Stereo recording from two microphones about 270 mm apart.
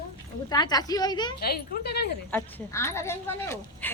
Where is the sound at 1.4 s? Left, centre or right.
Left.